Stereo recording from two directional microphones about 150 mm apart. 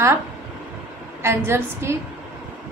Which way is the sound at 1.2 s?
15° right (ahead or behind).